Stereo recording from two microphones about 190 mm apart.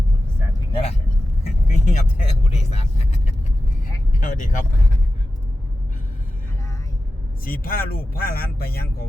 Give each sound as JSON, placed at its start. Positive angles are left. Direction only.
{"t": 0.7, "sound": "speech", "side_deg": 30}
{"t": 1.6, "sound": "vehicle", "side_deg": 40}
{"t": 7.4, "sound": "speech", "side_deg": 50}